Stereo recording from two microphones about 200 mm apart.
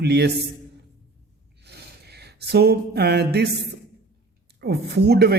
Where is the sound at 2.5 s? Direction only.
55° right (ahead or behind).